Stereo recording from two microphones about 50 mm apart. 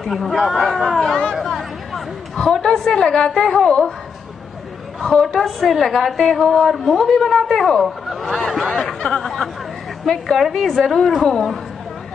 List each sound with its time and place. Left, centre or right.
0.0 s a woman's voice: centre
1.0 s chatter: centre
1.3 s chatter: centre
2.3 s a woman's voice: centre
5.0 s a woman's voice: centre